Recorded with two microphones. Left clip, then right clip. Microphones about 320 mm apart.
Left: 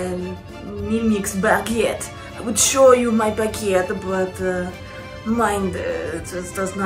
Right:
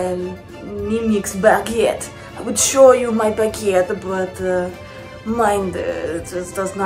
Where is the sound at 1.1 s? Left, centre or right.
Centre.